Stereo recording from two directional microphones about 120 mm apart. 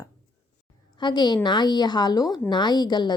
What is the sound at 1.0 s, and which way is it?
A woman's voice, 40° left (ahead or behind).